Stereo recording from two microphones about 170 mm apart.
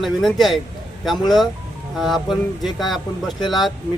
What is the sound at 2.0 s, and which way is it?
Speech, centre (ahead or behind).